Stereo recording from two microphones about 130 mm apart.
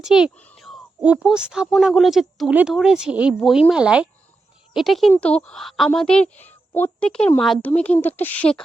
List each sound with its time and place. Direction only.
0.0 s speech: 5° right (ahead or behind)
0.3 s a sound: 5° left (ahead or behind)
1.0 s a woman's voice: 5° right (ahead or behind); by 8.6 s 10° left (ahead or behind)